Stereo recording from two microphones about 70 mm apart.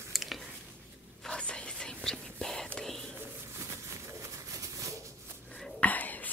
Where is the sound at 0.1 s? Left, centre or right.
Centre.